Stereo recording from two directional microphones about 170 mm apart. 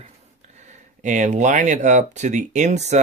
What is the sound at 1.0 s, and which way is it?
Speech, 45° right (ahead or behind).